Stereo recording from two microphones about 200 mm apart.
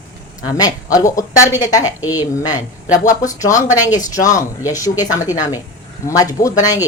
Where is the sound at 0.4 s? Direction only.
20° left (ahead or behind).